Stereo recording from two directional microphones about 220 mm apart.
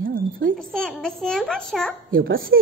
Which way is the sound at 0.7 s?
5° left (ahead or behind).